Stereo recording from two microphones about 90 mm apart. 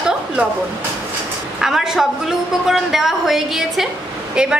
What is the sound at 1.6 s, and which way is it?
A woman's voice, 5° right (ahead or behind).